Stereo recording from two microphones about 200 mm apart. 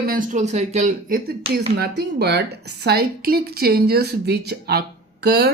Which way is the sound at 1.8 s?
55° right (ahead or behind).